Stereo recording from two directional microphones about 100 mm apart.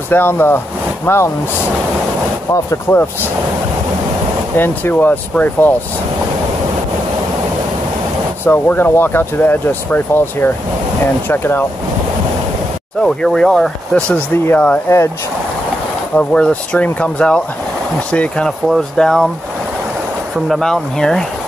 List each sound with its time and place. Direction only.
0.1 s speech: 20° left (ahead or behind)
2.9 s speech: 25° left (ahead or behind)
4.6 s speech: 20° left (ahead or behind)
8.5 s speech: 20° left (ahead or behind)
13.0 s speech: 5° left (ahead or behind)
16.2 s speech: 10° left (ahead or behind)
20.4 s speech: 5° left (ahead or behind)